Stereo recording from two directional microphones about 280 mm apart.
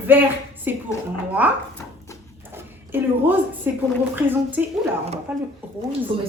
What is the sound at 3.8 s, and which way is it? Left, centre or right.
Speech, centre.